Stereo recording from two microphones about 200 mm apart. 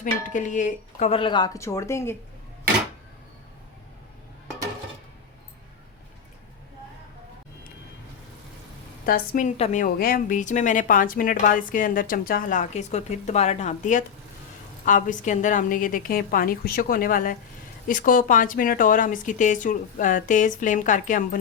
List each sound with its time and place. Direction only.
0.0 s speech: 40° left (ahead or behind); by 2.1 s 15° left (ahead or behind)
9.0 s a woman's voice: 45° left (ahead or behind)